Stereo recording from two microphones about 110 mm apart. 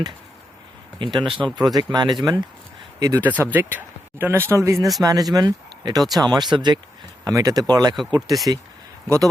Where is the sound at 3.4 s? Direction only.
20° right (ahead or behind); by 6.0 s 35° right (ahead or behind).